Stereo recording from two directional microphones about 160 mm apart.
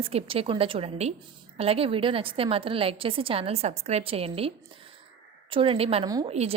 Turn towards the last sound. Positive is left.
turn(degrees=-40)  # may be behind; listen again after turning